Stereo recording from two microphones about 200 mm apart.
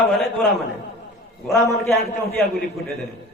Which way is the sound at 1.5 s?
15° left (ahead or behind).